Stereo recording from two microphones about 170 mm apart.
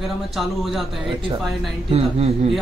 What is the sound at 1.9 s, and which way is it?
Speech, 35° right (ahead or behind).